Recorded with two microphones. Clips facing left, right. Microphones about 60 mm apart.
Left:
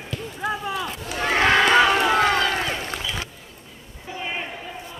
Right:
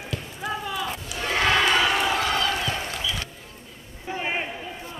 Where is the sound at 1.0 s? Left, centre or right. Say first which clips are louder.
Left 5 dB; left.